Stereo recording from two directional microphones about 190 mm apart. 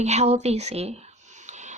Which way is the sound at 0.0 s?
35° right (ahead or behind).